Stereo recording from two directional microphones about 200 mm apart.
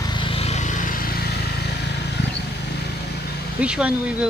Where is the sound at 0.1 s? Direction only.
25° left (ahead or behind); by 1.2 s 45° left (ahead or behind).